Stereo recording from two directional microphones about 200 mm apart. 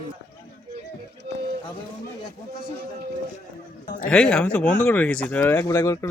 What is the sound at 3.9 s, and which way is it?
Speech, 45° left (ahead or behind).